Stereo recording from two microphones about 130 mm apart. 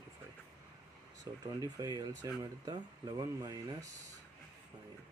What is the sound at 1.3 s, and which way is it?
Speech, 30° right (ahead or behind).